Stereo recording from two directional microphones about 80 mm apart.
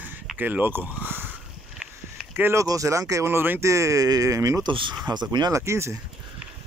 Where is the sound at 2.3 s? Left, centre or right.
Right.